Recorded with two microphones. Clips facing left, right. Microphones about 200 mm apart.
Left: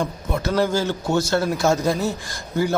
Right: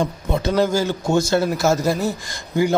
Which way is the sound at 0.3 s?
20° right (ahead or behind).